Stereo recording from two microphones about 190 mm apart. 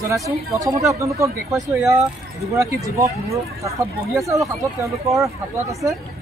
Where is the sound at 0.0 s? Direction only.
15° right (ahead or behind).